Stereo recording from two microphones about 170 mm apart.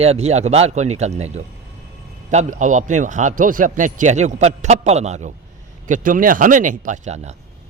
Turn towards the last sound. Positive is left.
turn(degrees=-40)  # may be behind; listen again after turning